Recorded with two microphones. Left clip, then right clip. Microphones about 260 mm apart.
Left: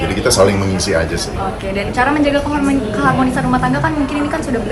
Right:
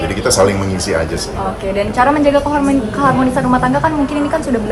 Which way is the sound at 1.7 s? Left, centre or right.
Right.